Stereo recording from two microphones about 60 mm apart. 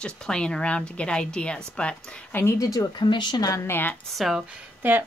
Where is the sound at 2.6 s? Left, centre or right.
Left.